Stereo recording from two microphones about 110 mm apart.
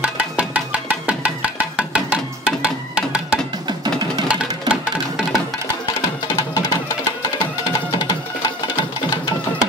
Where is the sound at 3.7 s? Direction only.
40° right (ahead or behind).